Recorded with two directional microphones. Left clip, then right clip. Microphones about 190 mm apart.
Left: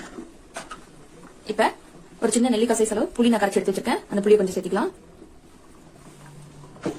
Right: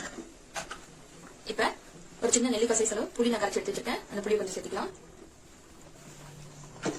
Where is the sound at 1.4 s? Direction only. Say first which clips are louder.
Left 8 dB; 45° left (ahead or behind).